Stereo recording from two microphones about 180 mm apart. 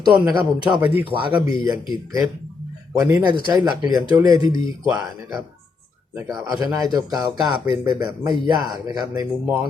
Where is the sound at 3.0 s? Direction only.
20° right (ahead or behind).